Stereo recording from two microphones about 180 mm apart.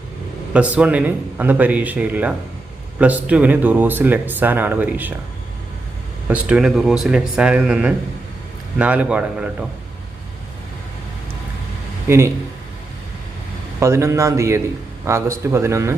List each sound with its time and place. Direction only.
0.5 s speech: 5° right (ahead or behind)
6.2 s speech: 5° right (ahead or behind)
12.0 s speech: 15° right (ahead or behind)
13.7 s speech: 15° right (ahead or behind)